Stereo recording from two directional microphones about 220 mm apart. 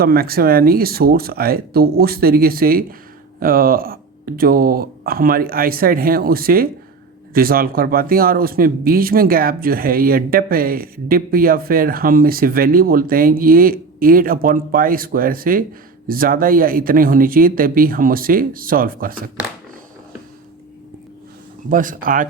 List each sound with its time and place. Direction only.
0.0 s speech: 45° right (ahead or behind)
21.7 s speech: 35° right (ahead or behind)